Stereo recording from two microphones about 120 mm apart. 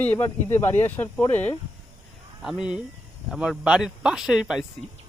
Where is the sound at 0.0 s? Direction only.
20° left (ahead or behind).